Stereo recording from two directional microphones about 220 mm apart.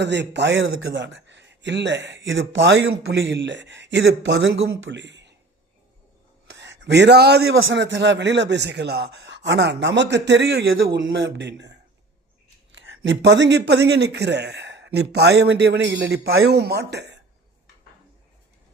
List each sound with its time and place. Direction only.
0.0 s a man's voice: 50° right (ahead or behind)
6.6 s a man's voice: 50° right (ahead or behind)
12.7 s a man's voice: 55° right (ahead or behind)